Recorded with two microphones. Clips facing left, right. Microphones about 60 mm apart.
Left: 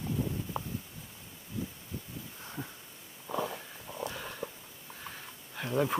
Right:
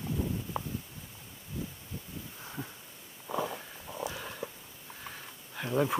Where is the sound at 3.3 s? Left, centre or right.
Centre.